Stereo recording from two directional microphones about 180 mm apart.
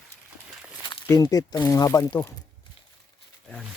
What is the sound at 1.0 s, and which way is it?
Speech, 20° left (ahead or behind).